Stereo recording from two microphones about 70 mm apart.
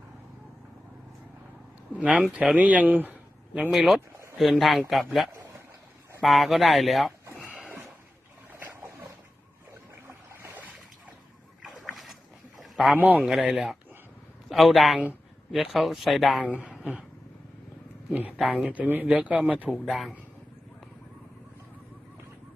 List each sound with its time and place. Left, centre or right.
1.9 s a sound: centre
2.3 s speech: centre
3.7 s speech: centre
6.2 s speech: centre
8.5 s boat: right
11.8 s boat: centre
12.5 s a sound: centre
13.0 s speech: right
13.5 s speech: centre
16.8 s cat: centre
18.1 s speech: right
19.7 s speech: centre